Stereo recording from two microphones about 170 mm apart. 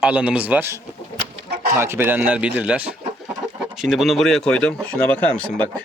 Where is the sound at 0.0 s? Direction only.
5° right (ahead or behind).